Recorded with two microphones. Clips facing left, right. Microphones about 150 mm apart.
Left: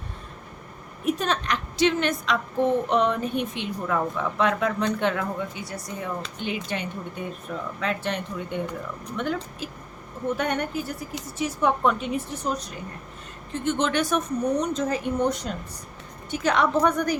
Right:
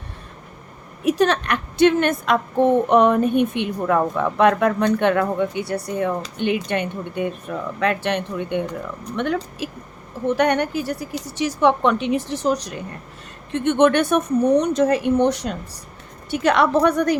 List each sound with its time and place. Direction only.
1.0 s a woman's voice: 75° right (ahead or behind)
13.5 s a woman's voice: 65° right (ahead or behind)
14.6 s a woman's voice: 70° right (ahead or behind)